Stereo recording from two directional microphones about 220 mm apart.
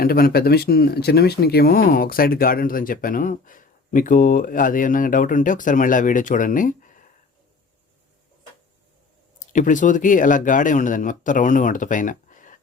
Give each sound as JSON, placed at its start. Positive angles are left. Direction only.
{"t": 0.0, "sound": "speech", "side_deg": 40}
{"t": 9.5, "sound": "speech", "side_deg": 35}